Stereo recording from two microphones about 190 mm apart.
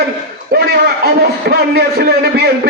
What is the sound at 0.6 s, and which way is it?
A man's voice, 55° right (ahead or behind).